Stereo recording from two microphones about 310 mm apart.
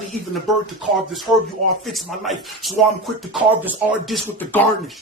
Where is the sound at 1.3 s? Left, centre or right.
Centre.